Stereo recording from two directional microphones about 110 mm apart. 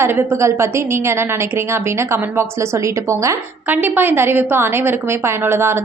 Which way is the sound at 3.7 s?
15° right (ahead or behind).